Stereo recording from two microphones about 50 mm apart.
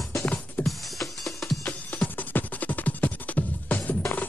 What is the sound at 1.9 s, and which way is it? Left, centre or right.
Music, left.